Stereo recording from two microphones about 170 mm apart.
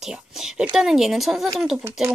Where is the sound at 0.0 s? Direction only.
Centre (ahead or behind).